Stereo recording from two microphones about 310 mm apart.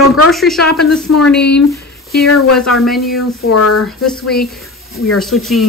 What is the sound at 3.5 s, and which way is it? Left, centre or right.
Speech, left.